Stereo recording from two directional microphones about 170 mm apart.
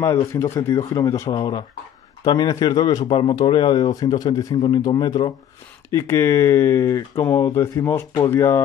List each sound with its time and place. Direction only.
0.3 s speech: 15° left (ahead or behind)